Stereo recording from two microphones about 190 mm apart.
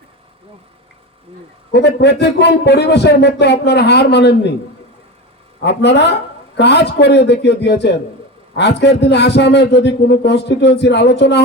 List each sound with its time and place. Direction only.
1.7 s speech: 65° left (ahead or behind)
5.6 s speech: 65° left (ahead or behind)